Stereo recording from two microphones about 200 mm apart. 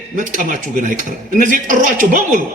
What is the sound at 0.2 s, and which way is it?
A man's voice, 40° right (ahead or behind).